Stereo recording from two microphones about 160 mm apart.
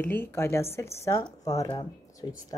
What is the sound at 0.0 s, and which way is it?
A woman's voice, 15° left (ahead or behind).